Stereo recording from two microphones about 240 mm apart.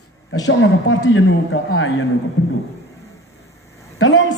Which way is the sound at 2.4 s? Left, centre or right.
Left.